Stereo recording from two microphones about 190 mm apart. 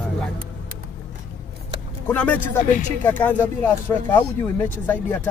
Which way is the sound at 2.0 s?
10° left (ahead or behind).